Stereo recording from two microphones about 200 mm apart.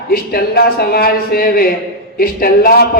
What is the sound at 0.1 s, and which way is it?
A man's voice, 50° left (ahead or behind).